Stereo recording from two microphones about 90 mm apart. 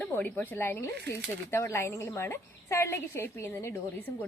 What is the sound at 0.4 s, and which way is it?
A woman's voice, 25° left (ahead or behind).